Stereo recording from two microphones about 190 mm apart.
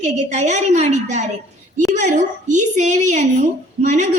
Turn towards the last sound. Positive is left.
turn(degrees=-40)  # may be behind; listen again after turning